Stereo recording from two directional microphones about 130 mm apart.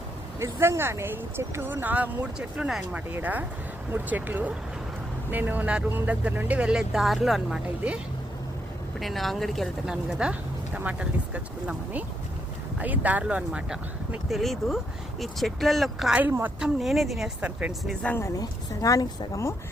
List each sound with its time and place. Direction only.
0.3 s speech: 25° right (ahead or behind); by 7.6 s centre (ahead or behind)
9.0 s speech: centre (ahead or behind)
16.2 s speech: 15° right (ahead or behind)
17.8 s speech: 10° left (ahead or behind)
18.2 s speech: 25° left (ahead or behind)